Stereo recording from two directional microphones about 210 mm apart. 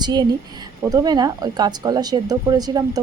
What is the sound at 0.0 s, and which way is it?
Speech, 20° right (ahead or behind).